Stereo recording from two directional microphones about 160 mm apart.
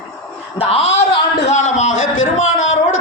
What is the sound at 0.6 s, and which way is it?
A man's voice, 40° left (ahead or behind).